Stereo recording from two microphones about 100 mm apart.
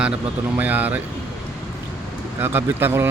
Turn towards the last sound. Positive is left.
turn(degrees=-25)  # may be behind; listen again after turning